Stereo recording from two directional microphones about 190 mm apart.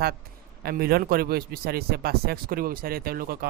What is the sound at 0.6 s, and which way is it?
A man's voice, 55° right (ahead or behind).